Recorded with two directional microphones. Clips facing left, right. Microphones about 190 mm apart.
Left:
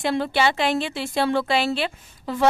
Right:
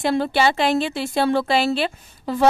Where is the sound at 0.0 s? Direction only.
40° right (ahead or behind).